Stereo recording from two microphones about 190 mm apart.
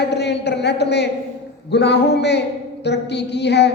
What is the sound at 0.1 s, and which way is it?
A woman's voice, 60° left (ahead or behind).